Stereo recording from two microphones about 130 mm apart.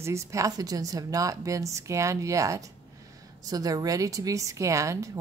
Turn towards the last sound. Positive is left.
turn(degrees=-25)  # may be behind; listen again after turning